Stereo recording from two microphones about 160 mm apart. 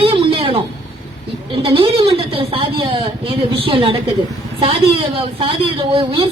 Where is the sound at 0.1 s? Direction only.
35° right (ahead or behind).